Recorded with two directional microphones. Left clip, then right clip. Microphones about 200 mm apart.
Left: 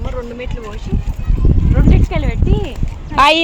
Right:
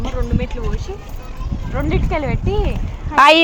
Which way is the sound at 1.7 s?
5° right (ahead or behind).